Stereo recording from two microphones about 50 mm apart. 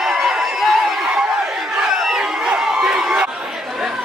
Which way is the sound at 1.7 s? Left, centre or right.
Centre.